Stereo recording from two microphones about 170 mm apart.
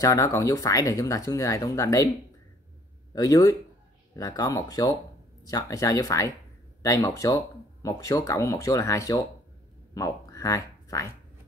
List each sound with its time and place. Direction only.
0.0 s speech: 20° left (ahead or behind)
3.1 s speech: 20° left (ahead or behind)